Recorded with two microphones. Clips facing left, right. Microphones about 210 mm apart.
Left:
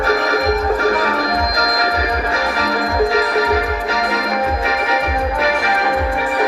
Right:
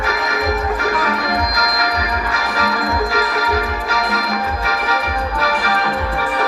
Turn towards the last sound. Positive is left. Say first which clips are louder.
# left 2 dB
turn(degrees=20)  # may be behind; listen again after turning